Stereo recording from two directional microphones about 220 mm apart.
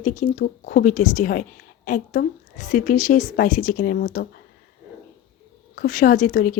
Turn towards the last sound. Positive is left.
turn(degrees=40)  # may be behind; listen again after turning